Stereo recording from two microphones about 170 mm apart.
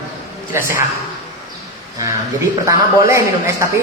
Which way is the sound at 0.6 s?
55° left (ahead or behind).